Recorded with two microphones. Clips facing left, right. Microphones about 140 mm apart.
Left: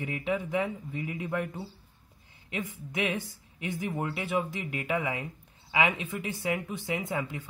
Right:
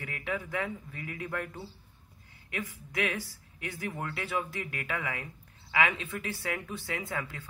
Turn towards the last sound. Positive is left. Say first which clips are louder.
# left 4 dB
turn(degrees=20)  # may be behind; listen again after turning